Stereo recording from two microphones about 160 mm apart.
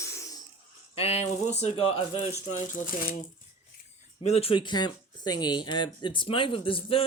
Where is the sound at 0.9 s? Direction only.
40° left (ahead or behind).